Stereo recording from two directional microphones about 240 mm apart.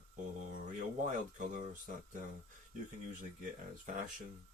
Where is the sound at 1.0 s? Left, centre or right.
Right.